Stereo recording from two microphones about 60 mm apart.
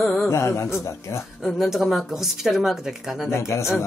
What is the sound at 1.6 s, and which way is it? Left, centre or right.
A woman's voice, centre.